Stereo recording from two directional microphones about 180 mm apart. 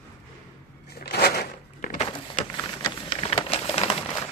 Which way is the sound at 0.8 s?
60° left (ahead or behind).